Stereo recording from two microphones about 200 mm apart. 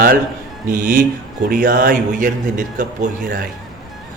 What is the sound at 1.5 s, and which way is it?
A man's voice, 45° right (ahead or behind).